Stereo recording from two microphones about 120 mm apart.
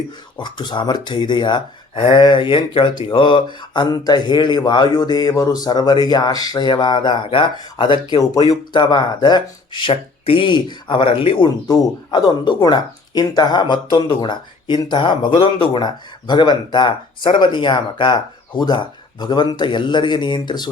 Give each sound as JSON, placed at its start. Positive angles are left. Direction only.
{"t": 0.3, "sound": "speech", "side_deg": 40}